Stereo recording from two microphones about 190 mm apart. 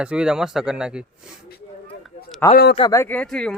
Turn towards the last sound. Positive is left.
turn(degrees=5)  # may be behind; listen again after turning